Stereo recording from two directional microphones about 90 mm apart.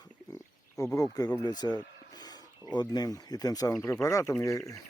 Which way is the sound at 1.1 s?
50° left (ahead or behind).